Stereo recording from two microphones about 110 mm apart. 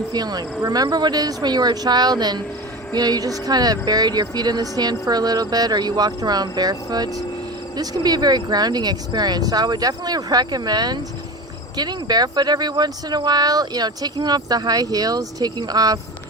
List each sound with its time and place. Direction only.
0.1 s speech: 35° right (ahead or behind)